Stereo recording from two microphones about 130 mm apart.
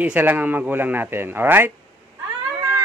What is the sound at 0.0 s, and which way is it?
A man's voice, 10° right (ahead or behind).